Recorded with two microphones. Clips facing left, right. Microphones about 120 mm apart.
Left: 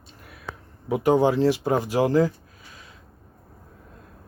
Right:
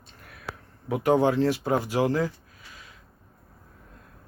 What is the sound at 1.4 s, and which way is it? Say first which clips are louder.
Speech: left 3 dB; 25° left (ahead or behind).